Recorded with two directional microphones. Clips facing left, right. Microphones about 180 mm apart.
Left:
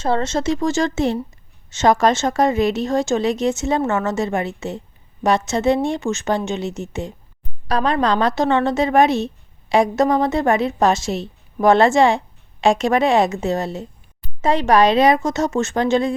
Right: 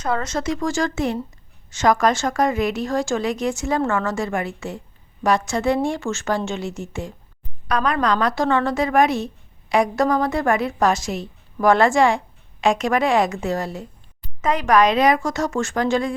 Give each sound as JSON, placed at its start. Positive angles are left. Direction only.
{"t": 0.0, "sound": "a woman's voice", "side_deg": 25}